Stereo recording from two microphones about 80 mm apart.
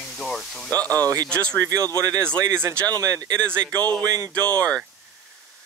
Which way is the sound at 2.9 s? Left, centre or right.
Right.